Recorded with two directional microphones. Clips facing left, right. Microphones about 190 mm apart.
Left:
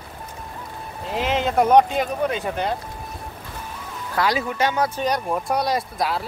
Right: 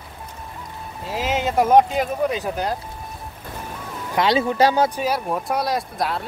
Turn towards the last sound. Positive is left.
turn(degrees=0)  # may be behind; listen again after turning